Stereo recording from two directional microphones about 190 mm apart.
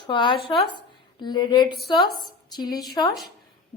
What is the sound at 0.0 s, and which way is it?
A man's voice, 25° left (ahead or behind).